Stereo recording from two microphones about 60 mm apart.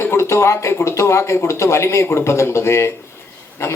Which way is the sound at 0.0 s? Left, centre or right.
Left.